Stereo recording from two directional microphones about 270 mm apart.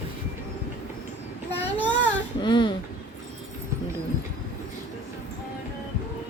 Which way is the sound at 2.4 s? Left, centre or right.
Centre.